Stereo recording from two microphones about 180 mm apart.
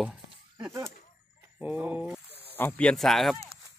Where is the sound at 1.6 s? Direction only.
10° right (ahead or behind).